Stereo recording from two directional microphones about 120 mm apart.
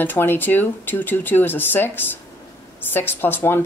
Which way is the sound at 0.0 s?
15° left (ahead or behind).